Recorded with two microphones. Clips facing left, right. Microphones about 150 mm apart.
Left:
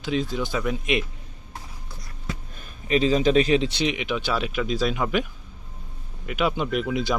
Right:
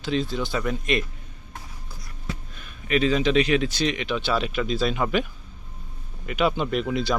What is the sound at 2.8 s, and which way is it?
Speech, 30° left (ahead or behind).